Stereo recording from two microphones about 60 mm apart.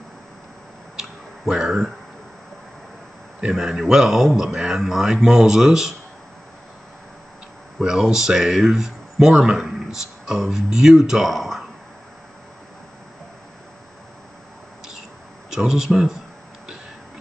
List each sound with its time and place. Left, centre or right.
0.9 s a sound: centre
3.3 s speech: centre
7.8 s speech: centre
15.5 s speech: centre